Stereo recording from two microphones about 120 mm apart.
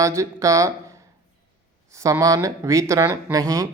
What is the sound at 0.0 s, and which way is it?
Speech, 25° right (ahead or behind).